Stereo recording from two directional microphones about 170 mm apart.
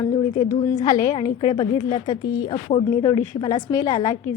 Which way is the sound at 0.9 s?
25° left (ahead or behind).